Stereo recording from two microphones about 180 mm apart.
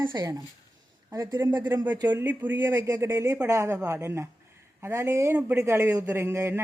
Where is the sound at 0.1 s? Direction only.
20° right (ahead or behind).